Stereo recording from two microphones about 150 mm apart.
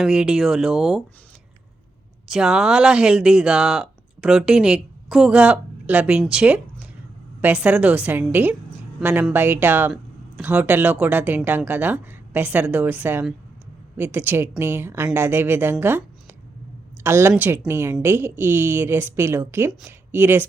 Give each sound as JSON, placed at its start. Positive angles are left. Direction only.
{"t": 0.0, "sound": "speech", "side_deg": -5}
{"t": 2.2, "sound": "a woman's voice", "side_deg": -5}